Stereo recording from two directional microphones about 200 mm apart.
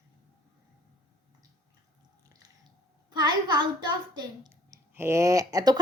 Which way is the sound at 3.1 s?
20° right (ahead or behind).